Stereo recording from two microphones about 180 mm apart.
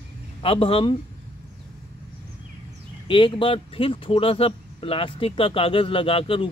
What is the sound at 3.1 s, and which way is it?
Speech, 30° left (ahead or behind).